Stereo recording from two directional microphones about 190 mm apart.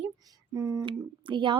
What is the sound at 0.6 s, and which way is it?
Speech, 15° right (ahead or behind).